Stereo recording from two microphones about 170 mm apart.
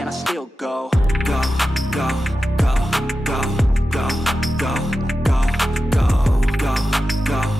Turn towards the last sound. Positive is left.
turn(degrees=0)  # may be behind; listen again after turning